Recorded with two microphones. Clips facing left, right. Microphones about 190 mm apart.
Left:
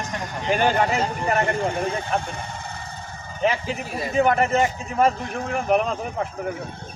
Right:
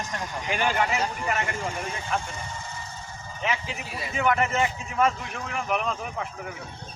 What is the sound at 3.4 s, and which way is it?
A man's voice, 40° left (ahead or behind).